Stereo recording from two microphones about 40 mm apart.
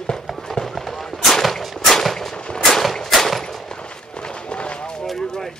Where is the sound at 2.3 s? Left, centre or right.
Left.